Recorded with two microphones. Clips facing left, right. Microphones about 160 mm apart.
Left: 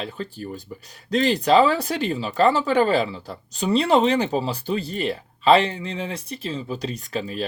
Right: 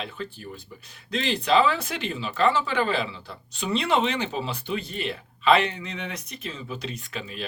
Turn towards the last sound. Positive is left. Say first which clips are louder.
# left 7 dB
turn(degrees=35)  # may be behind; listen again after turning